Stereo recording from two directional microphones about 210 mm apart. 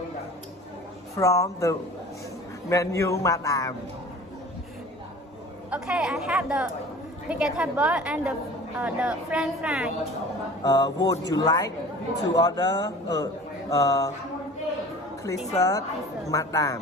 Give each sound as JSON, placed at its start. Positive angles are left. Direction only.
{"t": 1.1, "sound": "a man's voice", "side_deg": 15}
{"t": 5.7, "sound": "speech", "side_deg": -5}
{"t": 10.6, "sound": "a man's voice", "side_deg": 15}
{"t": 15.5, "sound": "a man's voice", "side_deg": 15}